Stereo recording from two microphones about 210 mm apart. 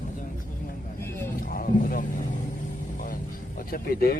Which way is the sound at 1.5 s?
45° left (ahead or behind).